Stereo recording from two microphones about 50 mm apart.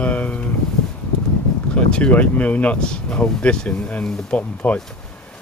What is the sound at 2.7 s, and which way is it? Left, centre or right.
Speech, centre.